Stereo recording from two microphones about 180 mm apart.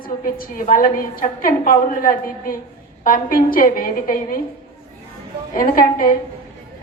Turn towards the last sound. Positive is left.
turn(degrees=50)  # may be behind; listen again after turning